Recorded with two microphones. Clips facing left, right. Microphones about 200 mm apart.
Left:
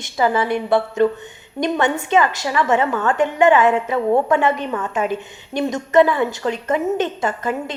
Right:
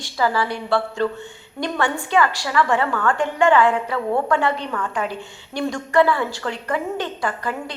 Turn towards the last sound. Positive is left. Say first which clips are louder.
# left 4 dB
turn(degrees=20)  # may be behind; listen again after turning